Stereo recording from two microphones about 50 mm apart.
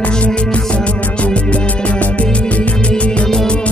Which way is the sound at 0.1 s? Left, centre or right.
Centre.